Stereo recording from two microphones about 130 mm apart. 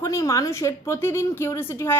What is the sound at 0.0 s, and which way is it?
A woman's voice, 25° left (ahead or behind).